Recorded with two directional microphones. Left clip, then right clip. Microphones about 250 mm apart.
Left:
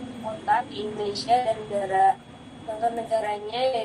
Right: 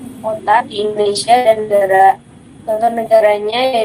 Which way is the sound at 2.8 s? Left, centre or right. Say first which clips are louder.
Right 14 dB; right.